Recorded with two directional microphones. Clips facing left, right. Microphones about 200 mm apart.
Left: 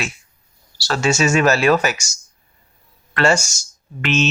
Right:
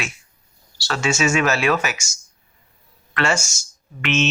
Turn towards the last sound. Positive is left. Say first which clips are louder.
# left 2 dB
turn(degrees=35)  # may be behind; listen again after turning